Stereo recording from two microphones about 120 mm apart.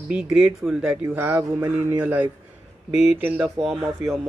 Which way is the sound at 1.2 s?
20° right (ahead or behind).